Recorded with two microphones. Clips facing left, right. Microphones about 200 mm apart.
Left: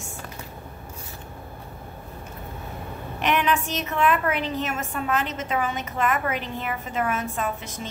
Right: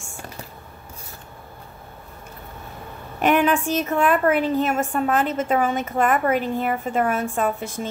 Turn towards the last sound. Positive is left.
turn(degrees=-50)  # may be behind; listen again after turning